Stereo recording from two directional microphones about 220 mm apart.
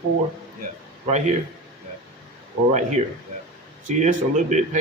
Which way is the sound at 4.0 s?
35° right (ahead or behind).